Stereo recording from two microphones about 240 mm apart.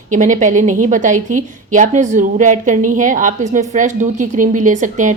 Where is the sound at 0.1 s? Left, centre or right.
Right.